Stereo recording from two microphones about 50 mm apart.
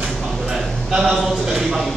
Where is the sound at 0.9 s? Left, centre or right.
Centre.